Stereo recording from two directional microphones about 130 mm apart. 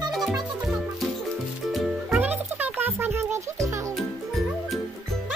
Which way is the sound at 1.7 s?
5° right (ahead or behind).